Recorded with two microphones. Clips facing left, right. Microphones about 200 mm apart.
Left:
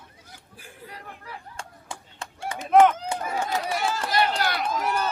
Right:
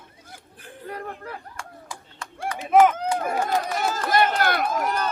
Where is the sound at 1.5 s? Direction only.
30° left (ahead or behind).